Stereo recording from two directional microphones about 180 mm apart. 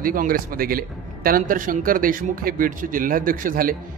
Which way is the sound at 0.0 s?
50° right (ahead or behind).